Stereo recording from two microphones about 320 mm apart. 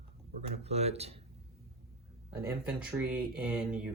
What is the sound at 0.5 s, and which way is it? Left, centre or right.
Speech, centre.